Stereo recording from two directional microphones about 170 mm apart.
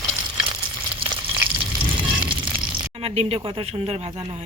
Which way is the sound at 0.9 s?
30° right (ahead or behind).